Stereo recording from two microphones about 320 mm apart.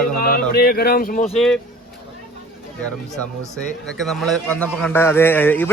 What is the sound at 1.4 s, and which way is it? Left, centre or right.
Speech, centre.